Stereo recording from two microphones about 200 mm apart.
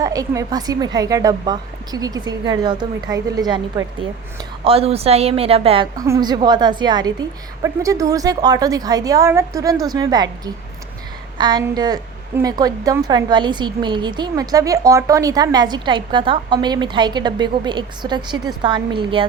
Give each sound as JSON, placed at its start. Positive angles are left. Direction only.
{"t": 0.0, "sound": "a woman's voice", "side_deg": -15}
{"t": 4.6, "sound": "a woman's voice", "side_deg": -30}